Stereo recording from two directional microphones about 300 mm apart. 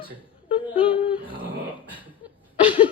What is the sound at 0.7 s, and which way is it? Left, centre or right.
Speech, centre.